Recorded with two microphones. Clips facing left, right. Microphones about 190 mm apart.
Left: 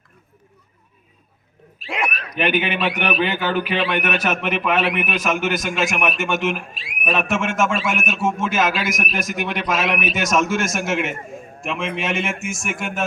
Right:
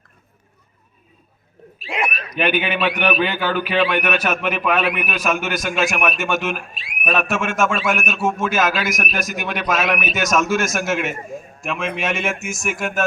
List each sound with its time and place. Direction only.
1.9 s owl: 5° right (ahead or behind)
2.3 s a man's voice: 20° left (ahead or behind)